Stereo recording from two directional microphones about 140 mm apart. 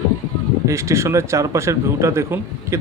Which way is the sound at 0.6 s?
20° right (ahead or behind).